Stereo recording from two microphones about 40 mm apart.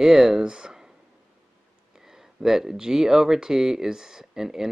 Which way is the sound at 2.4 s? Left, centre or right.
Centre.